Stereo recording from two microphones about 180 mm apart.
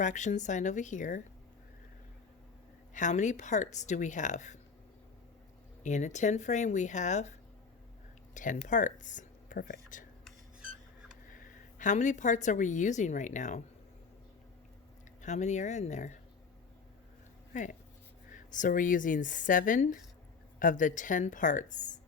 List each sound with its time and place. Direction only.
0.0 s a woman's voice: 45° left (ahead or behind)
2.9 s a woman's voice: 40° left (ahead or behind)
5.8 s speech: 40° left (ahead or behind)
11.3 s speech: 45° left (ahead or behind)
15.2 s speech: 40° left (ahead or behind)
17.5 s a woman's voice: 45° left (ahead or behind)